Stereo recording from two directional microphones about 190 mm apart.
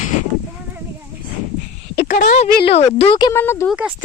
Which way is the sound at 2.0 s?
40° left (ahead or behind).